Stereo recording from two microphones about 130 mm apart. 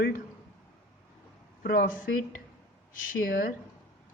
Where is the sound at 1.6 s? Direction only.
90° left.